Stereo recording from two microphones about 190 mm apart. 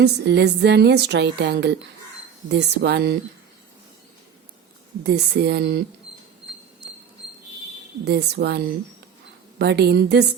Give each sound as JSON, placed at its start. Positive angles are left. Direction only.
{"t": 0.0, "sound": "a woman's voice", "side_deg": -65}
{"t": 5.0, "sound": "a woman's voice", "side_deg": -60}
{"t": 8.0, "sound": "a woman's voice", "side_deg": -60}